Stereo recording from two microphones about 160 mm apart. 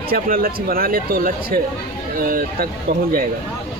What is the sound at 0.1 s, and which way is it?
Speech, 65° right (ahead or behind).